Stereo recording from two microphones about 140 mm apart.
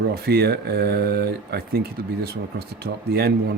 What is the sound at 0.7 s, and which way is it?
Speech, 90° right.